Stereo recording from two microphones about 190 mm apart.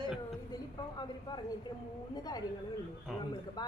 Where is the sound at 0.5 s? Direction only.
20° left (ahead or behind).